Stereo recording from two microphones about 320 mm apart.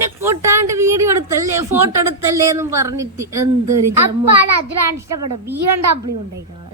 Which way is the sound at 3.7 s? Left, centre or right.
Right.